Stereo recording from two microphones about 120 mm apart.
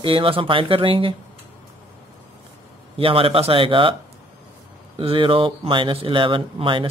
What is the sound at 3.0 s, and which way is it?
Speech, 50° right (ahead or behind).